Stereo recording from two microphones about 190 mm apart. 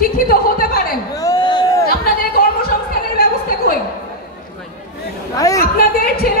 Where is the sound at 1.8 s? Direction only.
50° left (ahead or behind).